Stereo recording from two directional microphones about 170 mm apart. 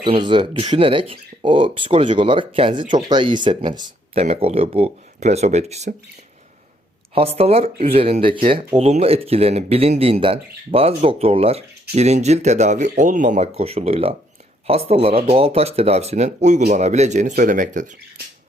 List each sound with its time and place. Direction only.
0.0 s speech: 30° right (ahead or behind)
7.1 s speech: 35° right (ahead or behind)